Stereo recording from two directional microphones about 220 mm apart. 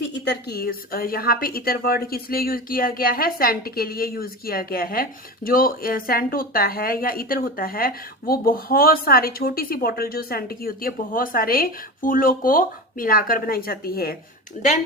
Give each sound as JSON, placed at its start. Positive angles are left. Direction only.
{"t": 0.4, "sound": "a woman's voice", "side_deg": 45}